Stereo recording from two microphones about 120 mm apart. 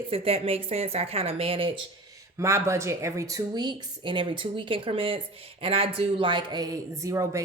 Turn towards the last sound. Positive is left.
turn(degrees=-25)  # may be behind; listen again after turning